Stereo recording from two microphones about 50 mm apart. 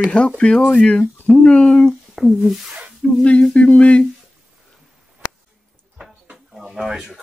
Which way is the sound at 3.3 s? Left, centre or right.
Left.